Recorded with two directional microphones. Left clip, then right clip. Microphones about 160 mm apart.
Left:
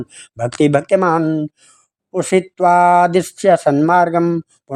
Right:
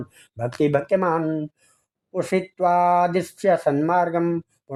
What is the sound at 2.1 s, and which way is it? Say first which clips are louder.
Speech: left 7 dB; 30° left (ahead or behind).